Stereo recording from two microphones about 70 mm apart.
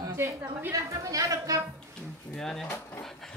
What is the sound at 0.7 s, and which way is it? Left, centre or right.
Speech, right.